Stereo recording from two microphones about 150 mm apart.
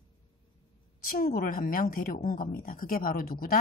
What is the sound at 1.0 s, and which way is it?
A woman's voice, 70° left (ahead or behind).